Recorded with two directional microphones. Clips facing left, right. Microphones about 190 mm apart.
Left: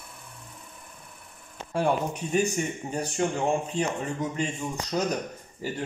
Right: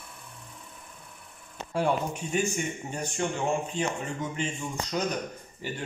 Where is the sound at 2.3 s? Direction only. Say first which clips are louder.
Left 4 dB; 35° left (ahead or behind).